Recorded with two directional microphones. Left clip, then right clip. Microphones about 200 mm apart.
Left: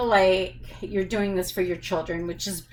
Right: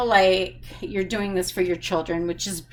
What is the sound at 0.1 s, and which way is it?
Speech, 45° right (ahead or behind).